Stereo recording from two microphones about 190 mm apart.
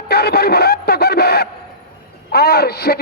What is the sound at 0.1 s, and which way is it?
A man's voice, 55° left (ahead or behind).